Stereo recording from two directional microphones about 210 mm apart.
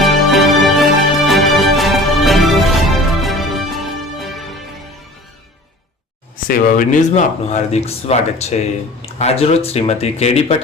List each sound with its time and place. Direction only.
0.0 s music: centre (ahead or behind)
6.3 s speech: 40° left (ahead or behind)